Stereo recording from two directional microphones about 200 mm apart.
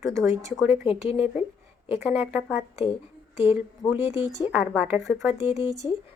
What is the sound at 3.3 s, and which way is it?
Speech, 30° left (ahead or behind).